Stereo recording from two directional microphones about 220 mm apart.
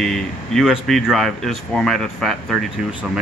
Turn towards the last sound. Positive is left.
turn(degrees=0)  # may be behind; listen again after turning